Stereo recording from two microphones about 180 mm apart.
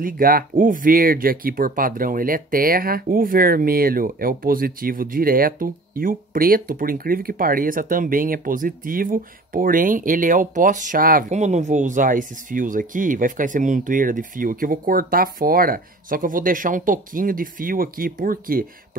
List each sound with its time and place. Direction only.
0.0 s speech: 55° right (ahead or behind)